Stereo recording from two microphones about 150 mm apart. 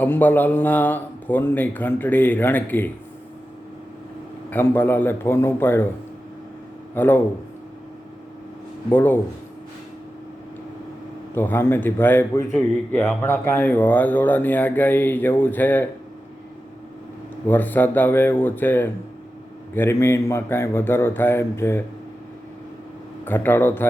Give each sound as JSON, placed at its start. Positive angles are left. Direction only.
{"t": 0.0, "sound": "speech", "side_deg": 15}
{"t": 4.4, "sound": "speech", "side_deg": 15}
{"t": 6.9, "sound": "speech", "side_deg": 15}
{"t": 8.9, "sound": "speech", "side_deg": 15}
{"t": 11.3, "sound": "speech", "side_deg": 15}
{"t": 17.4, "sound": "speech", "side_deg": 10}
{"t": 23.2, "sound": "speech", "side_deg": 15}